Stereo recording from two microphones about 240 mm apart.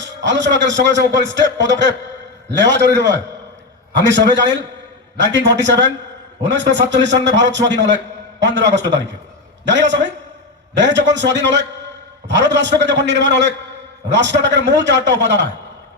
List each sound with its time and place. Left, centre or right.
0.0 s a man's voice: right